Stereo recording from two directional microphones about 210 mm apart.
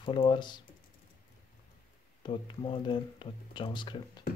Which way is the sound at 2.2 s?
20° left (ahead or behind).